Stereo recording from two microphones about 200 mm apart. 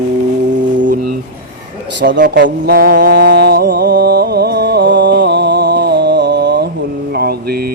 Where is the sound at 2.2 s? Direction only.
55° right (ahead or behind).